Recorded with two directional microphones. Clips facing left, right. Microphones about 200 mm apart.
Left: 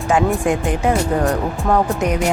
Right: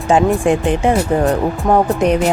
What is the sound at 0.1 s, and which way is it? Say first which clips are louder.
Speech: right 4 dB; 25° right (ahead or behind).